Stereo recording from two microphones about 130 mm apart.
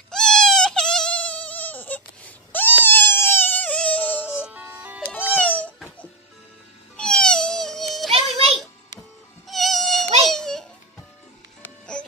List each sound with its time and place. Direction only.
0.1 s a sound: 5° left (ahead or behind)
4.5 s music: 10° right (ahead or behind)
5.1 s music: 15° left (ahead or behind)
8.1 s music: 50° right (ahead or behind)
9.5 s insect: centre (ahead or behind)
10.2 s a sound: 5° left (ahead or behind)
11.9 s music: 5° left (ahead or behind)